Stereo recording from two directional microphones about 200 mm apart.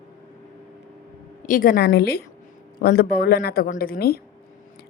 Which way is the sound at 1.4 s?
45° left (ahead or behind).